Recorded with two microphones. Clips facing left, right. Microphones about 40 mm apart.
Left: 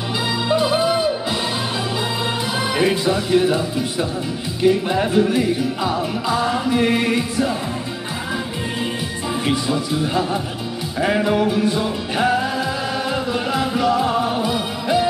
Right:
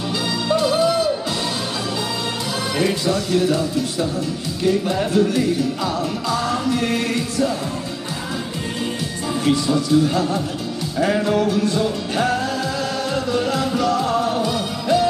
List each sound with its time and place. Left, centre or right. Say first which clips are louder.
0.5 s music: right 1 dB; centre
2.7 s music: left 1 dB; centre
9.4 s a man's voice: right 3 dB; centre
11.0 s music: even; centre